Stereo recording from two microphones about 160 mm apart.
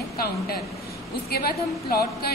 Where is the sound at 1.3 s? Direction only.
70° left (ahead or behind).